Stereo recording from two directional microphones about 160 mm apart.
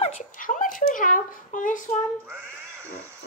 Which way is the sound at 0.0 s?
55° left (ahead or behind).